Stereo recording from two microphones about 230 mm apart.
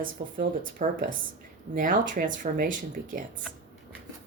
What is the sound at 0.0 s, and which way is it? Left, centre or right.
Speech, right.